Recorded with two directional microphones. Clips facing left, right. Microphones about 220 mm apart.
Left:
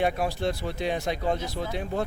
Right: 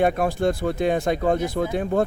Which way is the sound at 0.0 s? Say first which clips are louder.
Right 6 dB; 50° right (ahead or behind).